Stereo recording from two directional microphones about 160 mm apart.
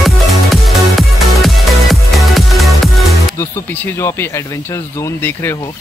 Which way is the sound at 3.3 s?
15° left (ahead or behind).